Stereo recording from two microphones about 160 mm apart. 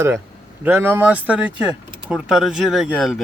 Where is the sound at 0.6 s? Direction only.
15° right (ahead or behind).